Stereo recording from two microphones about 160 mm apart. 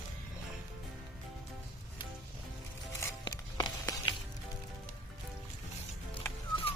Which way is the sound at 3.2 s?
25° left (ahead or behind).